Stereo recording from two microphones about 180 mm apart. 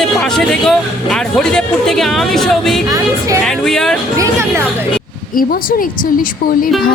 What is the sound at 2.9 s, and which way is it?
Speech, 20° right (ahead or behind).